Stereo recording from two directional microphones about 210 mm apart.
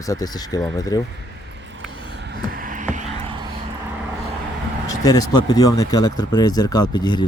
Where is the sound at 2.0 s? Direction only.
55° right (ahead or behind); by 3.1 s 35° right (ahead or behind).